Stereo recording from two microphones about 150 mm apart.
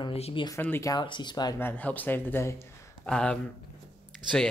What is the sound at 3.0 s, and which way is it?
Speech, 5° left (ahead or behind).